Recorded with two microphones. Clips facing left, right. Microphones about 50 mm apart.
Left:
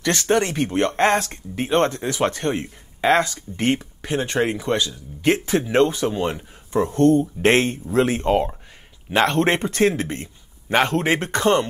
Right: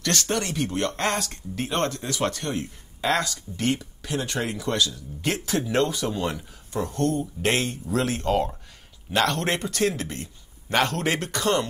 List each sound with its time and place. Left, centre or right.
0.0 s speech: left